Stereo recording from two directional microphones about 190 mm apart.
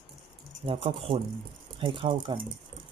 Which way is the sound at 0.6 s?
30° right (ahead or behind).